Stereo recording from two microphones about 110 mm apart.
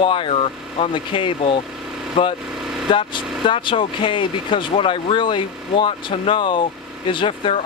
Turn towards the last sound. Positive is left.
turn(degrees=55)  # may be behind; listen again after turning